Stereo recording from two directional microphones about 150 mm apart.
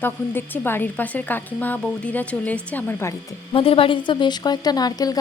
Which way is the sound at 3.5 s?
40° left (ahead or behind).